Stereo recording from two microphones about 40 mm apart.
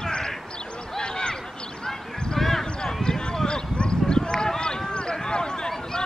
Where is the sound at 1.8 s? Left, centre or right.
Centre.